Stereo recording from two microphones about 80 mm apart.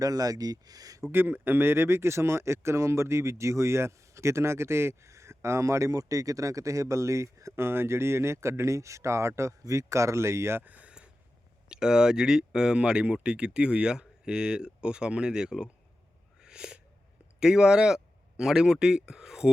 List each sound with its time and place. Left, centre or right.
0.0 s speech: right
1.1 s speech: right
10.6 s a sound: centre
11.7 s speech: centre
16.4 s a sound: centre
17.4 s speech: centre